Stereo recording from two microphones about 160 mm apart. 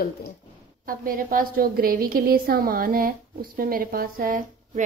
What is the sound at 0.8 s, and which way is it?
A woman's voice, 60° right (ahead or behind).